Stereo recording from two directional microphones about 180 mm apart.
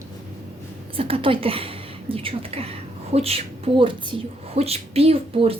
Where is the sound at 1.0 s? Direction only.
30° right (ahead or behind).